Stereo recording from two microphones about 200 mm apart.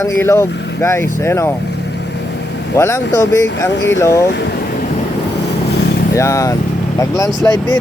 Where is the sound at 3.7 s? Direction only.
65° left (ahead or behind).